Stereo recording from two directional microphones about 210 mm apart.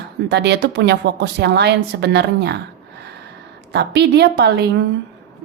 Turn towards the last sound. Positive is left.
turn(degrees=-55)  # may be behind; listen again after turning